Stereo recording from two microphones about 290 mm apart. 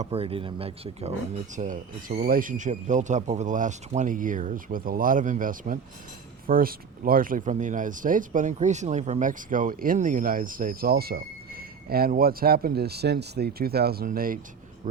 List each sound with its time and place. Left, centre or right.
0.0 s speech: centre